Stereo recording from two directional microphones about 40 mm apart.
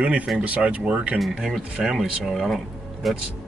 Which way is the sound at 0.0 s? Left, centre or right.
Right.